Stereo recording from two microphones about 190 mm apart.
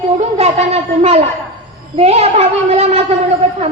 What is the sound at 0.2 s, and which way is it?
Speech, 35° right (ahead or behind).